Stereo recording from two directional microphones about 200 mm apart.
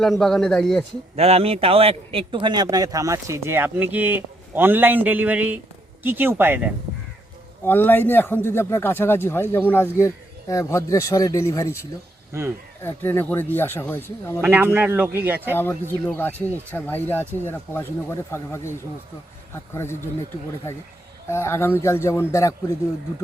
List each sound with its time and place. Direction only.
0.0 s a man's voice: centre (ahead or behind)
1.1 s a man's voice: 30° right (ahead or behind); by 6.7 s 10° right (ahead or behind)
7.6 s speech: 10° left (ahead or behind)
12.3 s a man's voice: 15° right (ahead or behind)
12.8 s speech: 10° left (ahead or behind)
14.4 s a man's voice: 10° right (ahead or behind)
15.5 s speech: 10° left (ahead or behind)
21.2 s speech: 15° left (ahead or behind)